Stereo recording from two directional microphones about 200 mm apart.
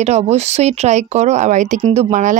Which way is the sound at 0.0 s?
35° right (ahead or behind).